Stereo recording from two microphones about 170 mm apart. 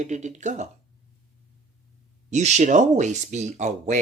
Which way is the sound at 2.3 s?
45° right (ahead or behind).